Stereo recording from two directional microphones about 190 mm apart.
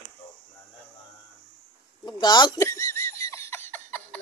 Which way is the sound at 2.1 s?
25° left (ahead or behind).